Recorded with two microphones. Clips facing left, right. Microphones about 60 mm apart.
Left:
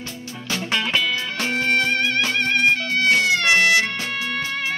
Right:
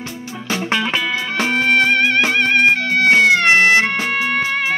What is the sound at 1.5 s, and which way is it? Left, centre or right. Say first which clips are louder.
Music: right 5 dB; right.